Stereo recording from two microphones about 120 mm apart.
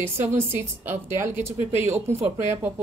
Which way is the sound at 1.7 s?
70° right (ahead or behind).